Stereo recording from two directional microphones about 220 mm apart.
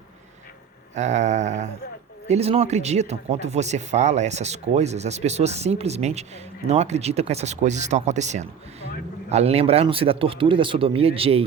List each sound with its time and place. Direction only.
0.9 s speech: 30° right (ahead or behind)